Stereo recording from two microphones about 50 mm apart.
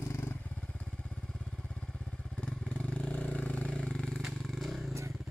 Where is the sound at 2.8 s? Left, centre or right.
Left.